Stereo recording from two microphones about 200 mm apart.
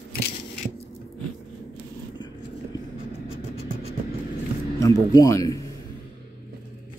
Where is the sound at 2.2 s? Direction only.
20° left (ahead or behind).